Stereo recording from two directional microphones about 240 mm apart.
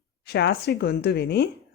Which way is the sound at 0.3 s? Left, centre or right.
Left.